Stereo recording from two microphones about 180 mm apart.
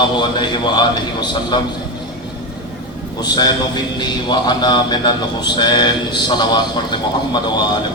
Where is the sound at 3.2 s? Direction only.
20° left (ahead or behind).